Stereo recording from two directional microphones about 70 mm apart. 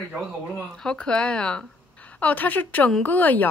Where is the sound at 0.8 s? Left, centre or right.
Centre.